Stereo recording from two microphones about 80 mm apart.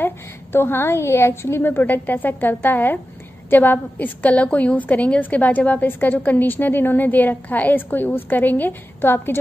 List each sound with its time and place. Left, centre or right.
0.0 s a woman's voice: left